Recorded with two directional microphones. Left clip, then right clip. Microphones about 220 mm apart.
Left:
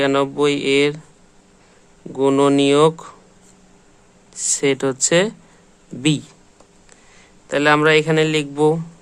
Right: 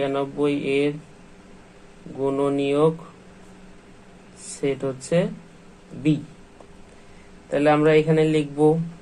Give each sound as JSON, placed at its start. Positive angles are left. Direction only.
{"t": 0.0, "sound": "speech", "side_deg": 45}
{"t": 2.1, "sound": "speech", "side_deg": 50}
{"t": 4.6, "sound": "speech", "side_deg": 45}
{"t": 7.5, "sound": "a man's voice", "side_deg": 35}